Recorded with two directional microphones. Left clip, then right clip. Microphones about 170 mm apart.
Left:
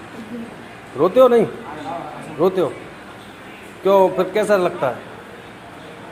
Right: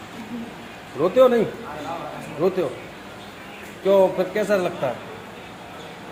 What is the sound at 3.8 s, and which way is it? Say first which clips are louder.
A man's voice: left 3 dB; 40° left (ahead or behind).